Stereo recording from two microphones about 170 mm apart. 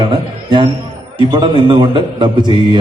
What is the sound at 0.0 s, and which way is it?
A man's voice, 30° right (ahead or behind).